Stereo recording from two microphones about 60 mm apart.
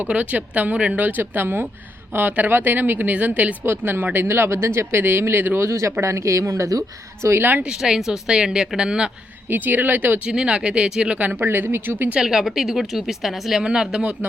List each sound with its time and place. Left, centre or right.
0.0 s speech: right
5.6 s speech: right
7.3 s speech: right
7.6 s speech: centre
9.5 s speech: right
10.2 s speech: centre
11.2 s speech: right
12.1 s speech: centre